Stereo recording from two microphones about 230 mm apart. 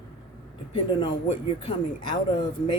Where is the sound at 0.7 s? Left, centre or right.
Left.